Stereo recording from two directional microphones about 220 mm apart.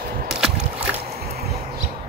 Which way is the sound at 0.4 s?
5° right (ahead or behind).